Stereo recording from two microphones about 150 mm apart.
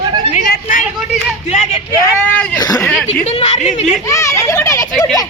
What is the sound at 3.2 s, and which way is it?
Speech, 45° left (ahead or behind).